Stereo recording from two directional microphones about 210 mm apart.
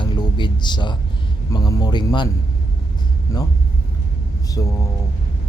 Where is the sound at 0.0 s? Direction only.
20° left (ahead or behind).